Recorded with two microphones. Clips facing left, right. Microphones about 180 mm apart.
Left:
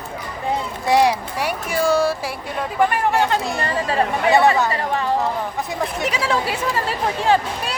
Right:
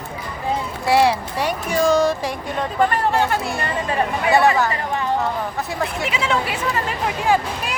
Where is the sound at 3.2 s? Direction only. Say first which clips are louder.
Left 1 dB; 20° left (ahead or behind).